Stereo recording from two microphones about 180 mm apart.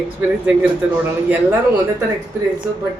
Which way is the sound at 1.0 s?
10° right (ahead or behind).